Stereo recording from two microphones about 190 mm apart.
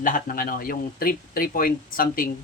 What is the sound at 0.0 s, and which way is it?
Speech, 45° left (ahead or behind).